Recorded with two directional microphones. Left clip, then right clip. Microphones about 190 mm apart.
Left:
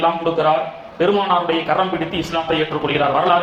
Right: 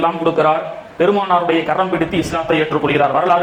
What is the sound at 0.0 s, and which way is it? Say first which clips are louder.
A man's voice: right 2 dB; 35° right (ahead or behind).